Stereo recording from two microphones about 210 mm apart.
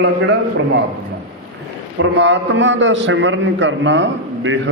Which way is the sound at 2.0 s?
60° right (ahead or behind).